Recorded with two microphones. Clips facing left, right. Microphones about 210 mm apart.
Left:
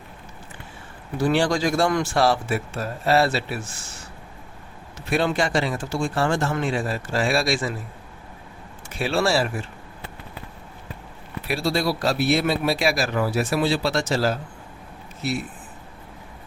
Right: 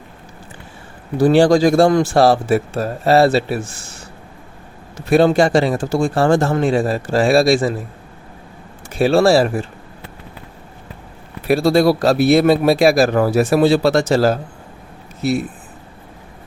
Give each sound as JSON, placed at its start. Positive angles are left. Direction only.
{"t": 1.2, "sound": "a man's voice", "side_deg": -35}
{"t": 4.9, "sound": "a man's voice", "side_deg": -40}
{"t": 8.9, "sound": "a man's voice", "side_deg": -40}
{"t": 11.4, "sound": "a man's voice", "side_deg": -45}